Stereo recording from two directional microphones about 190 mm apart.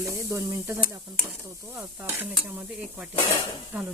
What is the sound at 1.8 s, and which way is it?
Stir, 10° right (ahead or behind).